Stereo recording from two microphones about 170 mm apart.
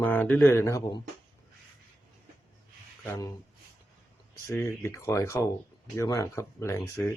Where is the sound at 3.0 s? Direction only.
20° left (ahead or behind).